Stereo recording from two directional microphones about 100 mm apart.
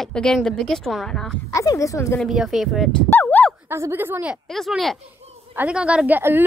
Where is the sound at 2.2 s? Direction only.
5° right (ahead or behind).